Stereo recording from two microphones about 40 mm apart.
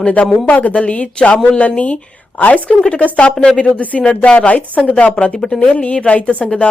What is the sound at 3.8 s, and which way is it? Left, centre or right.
Speech, left.